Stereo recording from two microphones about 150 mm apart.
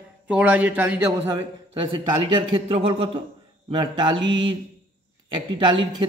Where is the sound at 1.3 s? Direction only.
30° right (ahead or behind).